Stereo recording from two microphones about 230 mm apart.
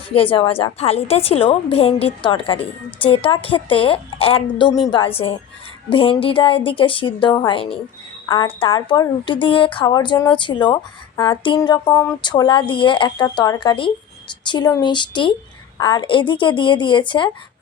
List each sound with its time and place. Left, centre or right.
0.1 s a woman's voice: left
11.9 s a sound: centre
12.2 s a woman's voice: centre